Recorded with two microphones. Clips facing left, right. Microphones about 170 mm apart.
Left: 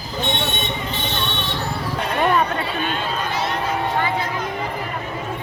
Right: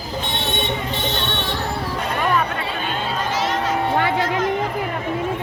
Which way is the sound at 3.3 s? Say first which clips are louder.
Right 3 dB; 90° right.